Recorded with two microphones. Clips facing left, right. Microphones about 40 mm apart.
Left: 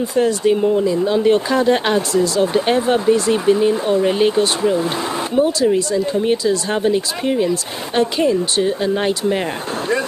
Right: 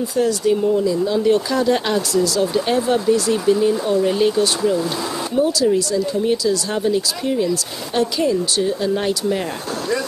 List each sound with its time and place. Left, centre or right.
0.1 s speech: left